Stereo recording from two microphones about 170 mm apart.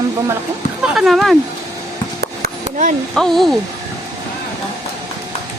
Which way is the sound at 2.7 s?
45° right (ahead or behind).